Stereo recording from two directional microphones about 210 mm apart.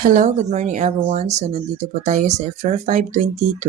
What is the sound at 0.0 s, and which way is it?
Speech, 35° right (ahead or behind).